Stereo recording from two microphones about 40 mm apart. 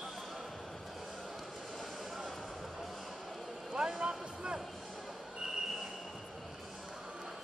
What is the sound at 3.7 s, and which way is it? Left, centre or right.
Vehicle, right.